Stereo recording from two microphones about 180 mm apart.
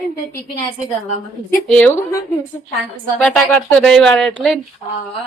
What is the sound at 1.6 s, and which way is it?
Speech, 10° left (ahead or behind).